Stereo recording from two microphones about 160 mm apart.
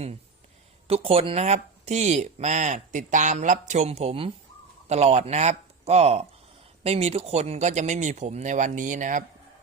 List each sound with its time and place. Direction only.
0.9 s speech: 40° right (ahead or behind)